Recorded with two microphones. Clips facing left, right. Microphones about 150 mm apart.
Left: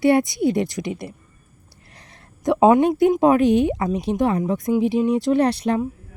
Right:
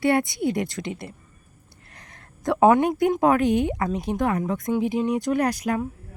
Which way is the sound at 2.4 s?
20° left (ahead or behind).